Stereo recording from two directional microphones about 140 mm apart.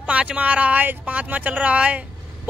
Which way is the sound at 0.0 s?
10° right (ahead or behind).